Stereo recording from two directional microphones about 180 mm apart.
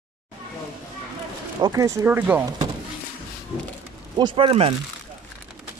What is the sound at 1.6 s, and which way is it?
Speech, 20° right (ahead or behind).